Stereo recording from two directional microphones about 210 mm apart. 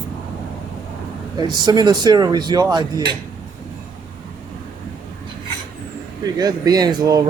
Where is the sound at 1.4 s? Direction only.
20° right (ahead or behind).